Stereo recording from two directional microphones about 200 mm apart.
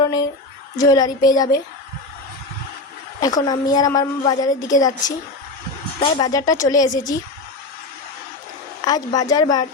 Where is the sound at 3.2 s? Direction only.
20° left (ahead or behind).